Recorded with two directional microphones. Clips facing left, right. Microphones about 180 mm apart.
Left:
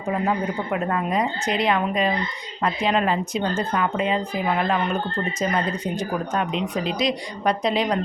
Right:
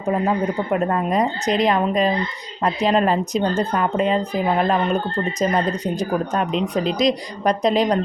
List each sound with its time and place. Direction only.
0.7 s speech: 40° right (ahead or behind)